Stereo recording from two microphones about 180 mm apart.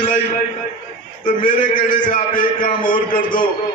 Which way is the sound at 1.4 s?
25° left (ahead or behind).